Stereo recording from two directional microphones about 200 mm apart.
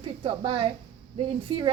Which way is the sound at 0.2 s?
25° right (ahead or behind).